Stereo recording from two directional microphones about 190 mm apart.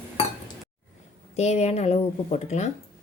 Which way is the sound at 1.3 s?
35° left (ahead or behind).